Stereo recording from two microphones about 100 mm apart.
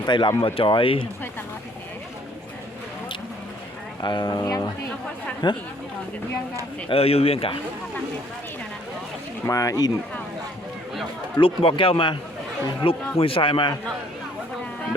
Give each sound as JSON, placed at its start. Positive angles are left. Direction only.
{"t": 0.0, "sound": "speech", "side_deg": 50}
{"t": 0.4, "sound": "a man's voice", "side_deg": 60}
{"t": 4.0, "sound": "speech", "side_deg": 45}
{"t": 5.4, "sound": "speech", "side_deg": 50}
{"t": 6.8, "sound": "speech", "side_deg": 75}
{"t": 9.5, "sound": "speech", "side_deg": 35}
{"t": 11.3, "sound": "a man's voice", "side_deg": 60}